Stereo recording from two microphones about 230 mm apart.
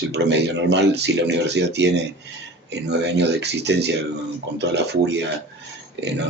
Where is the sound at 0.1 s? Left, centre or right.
Right.